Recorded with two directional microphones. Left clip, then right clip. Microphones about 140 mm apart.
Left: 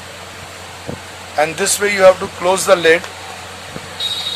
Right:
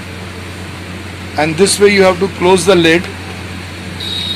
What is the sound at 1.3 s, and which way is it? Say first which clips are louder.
Speech: right 5 dB; 45° left (ahead or behind).